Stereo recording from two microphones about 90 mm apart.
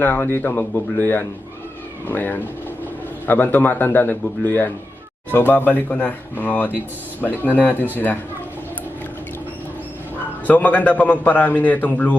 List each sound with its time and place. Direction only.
0.0 s a man's voice: 20° left (ahead or behind)
10.4 s a man's voice: 20° left (ahead or behind)